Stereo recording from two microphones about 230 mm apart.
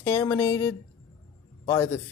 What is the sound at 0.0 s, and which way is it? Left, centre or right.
Speech, centre.